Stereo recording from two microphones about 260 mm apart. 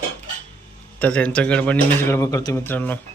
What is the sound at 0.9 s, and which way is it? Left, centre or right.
A man's voice, centre.